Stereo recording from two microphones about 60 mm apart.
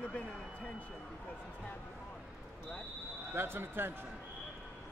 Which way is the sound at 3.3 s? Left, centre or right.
Right.